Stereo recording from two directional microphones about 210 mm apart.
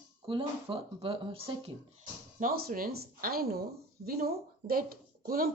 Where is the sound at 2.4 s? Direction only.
45° right (ahead or behind).